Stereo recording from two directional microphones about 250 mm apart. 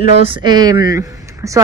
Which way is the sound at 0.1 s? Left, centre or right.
Right.